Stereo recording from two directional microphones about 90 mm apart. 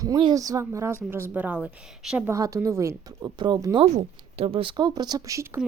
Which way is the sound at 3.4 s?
60° right (ahead or behind).